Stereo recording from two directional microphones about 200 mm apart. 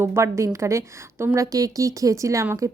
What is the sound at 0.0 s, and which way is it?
A woman's voice, 15° right (ahead or behind).